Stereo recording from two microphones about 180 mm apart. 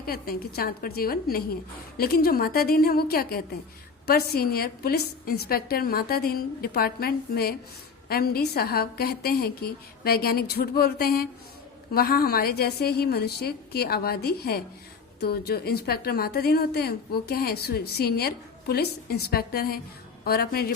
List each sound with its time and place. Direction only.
0.0 s a woman's voice: 55° left (ahead or behind)